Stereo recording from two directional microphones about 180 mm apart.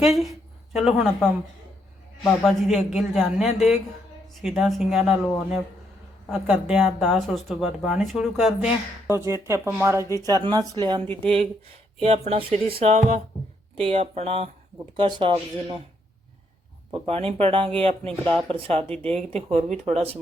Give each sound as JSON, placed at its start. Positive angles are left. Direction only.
{"t": 0.0, "sound": "speech", "side_deg": 0}
{"t": 6.3, "sound": "speech", "side_deg": -5}
{"t": 9.0, "sound": "speech", "side_deg": -15}
{"t": 12.0, "sound": "speech", "side_deg": -35}
{"t": 16.9, "sound": "speech", "side_deg": -30}